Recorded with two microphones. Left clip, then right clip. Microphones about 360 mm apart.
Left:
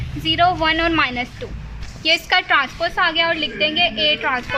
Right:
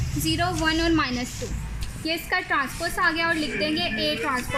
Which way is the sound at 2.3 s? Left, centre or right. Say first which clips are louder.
Left 8 dB; left.